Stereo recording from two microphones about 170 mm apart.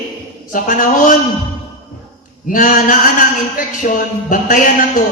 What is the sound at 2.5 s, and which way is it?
A man's voice, 50° left (ahead or behind).